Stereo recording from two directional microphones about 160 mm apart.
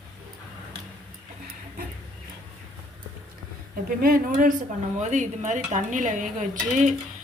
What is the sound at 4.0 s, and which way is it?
A woman's voice, 65° right (ahead or behind).